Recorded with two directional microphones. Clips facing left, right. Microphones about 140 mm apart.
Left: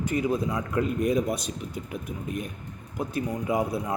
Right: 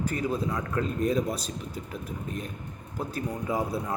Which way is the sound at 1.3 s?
35° right (ahead or behind).